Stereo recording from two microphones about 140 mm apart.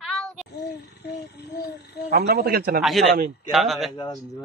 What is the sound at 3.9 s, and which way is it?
Speech, 30° left (ahead or behind).